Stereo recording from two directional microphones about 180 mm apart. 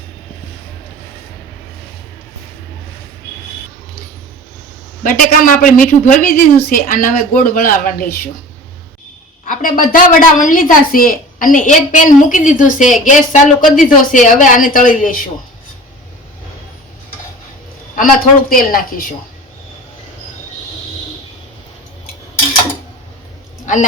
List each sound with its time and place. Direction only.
5.0 s a woman's voice: 50° left (ahead or behind)
9.5 s a woman's voice: 50° left (ahead or behind)
17.9 s a woman's voice: 50° left (ahead or behind)